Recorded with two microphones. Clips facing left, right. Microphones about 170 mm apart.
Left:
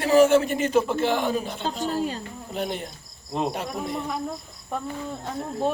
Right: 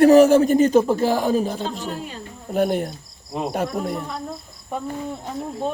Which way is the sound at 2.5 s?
50° right (ahead or behind).